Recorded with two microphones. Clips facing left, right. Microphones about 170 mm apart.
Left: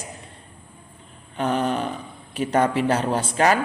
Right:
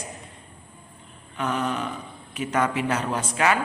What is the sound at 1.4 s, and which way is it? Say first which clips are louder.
A man's voice: left 4 dB; 30° left (ahead or behind).